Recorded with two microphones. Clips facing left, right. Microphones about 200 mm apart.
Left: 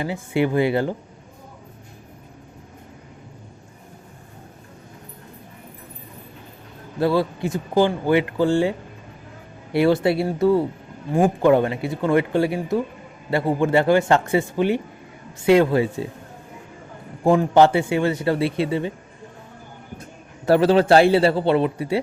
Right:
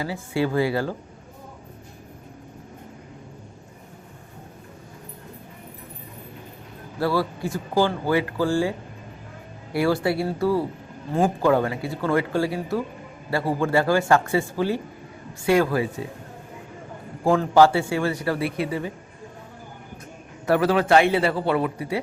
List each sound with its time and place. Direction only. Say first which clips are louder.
0.0 s speech: left 3 dB; 20° left (ahead or behind)
7.0 s speech: left 4 dB; 20° left (ahead or behind)
9.7 s speech: left 4 dB; 25° left (ahead or behind)
17.2 s speech: left 2 dB; 20° left (ahead or behind)
20.5 s speech: left 4 dB; 30° left (ahead or behind)